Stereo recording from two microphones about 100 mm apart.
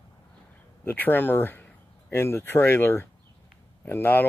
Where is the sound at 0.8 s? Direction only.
20° left (ahead or behind).